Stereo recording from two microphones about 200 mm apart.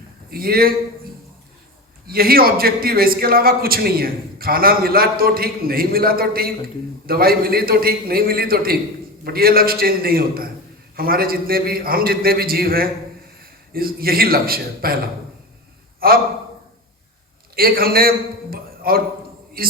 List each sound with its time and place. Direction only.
0.3 s a man's voice: 50° right (ahead or behind)
2.0 s a man's voice: 50° right (ahead or behind)
16.0 s a man's voice: 50° right (ahead or behind)
17.5 s a man's voice: 50° right (ahead or behind)
18.5 s a sound: 50° right (ahead or behind)
19.6 s a man's voice: 50° right (ahead or behind)